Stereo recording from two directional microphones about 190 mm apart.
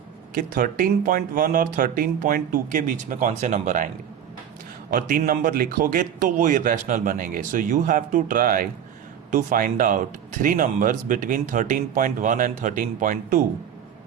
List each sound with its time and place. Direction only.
0.3 s speech: 50° right (ahead or behind)